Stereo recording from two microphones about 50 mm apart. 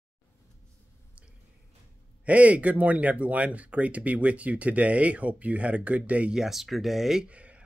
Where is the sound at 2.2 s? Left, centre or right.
Right.